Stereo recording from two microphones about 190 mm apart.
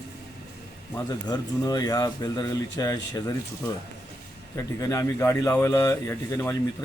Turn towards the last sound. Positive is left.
turn(degrees=15)  # may be behind; listen again after turning